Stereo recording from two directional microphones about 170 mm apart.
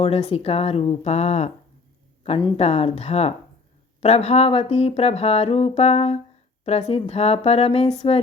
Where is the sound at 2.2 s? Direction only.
35° left (ahead or behind).